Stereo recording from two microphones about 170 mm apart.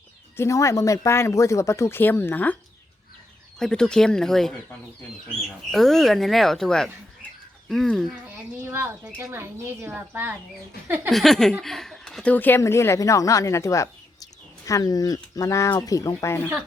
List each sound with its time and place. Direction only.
0.3 s speech: 15° left (ahead or behind)
3.6 s speech: 5° left (ahead or behind)
8.6 s speech: 15° right (ahead or behind)
11.1 s a woman's voice: centre (ahead or behind)